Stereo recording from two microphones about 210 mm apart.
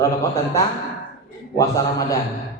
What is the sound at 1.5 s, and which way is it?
Speech, 15° left (ahead or behind).